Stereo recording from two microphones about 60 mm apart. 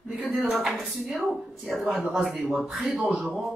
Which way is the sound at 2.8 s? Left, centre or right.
Centre.